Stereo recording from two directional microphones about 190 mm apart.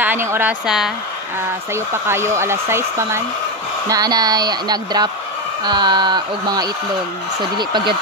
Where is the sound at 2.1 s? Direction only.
15° right (ahead or behind).